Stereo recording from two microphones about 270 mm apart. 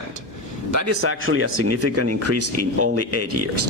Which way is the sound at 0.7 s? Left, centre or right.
Right.